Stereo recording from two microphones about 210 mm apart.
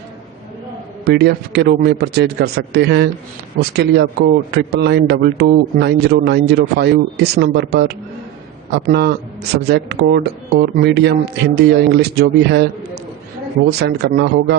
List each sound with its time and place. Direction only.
1.0 s a man's voice: 50° right (ahead or behind)
13.7 s a man's voice: 50° right (ahead or behind)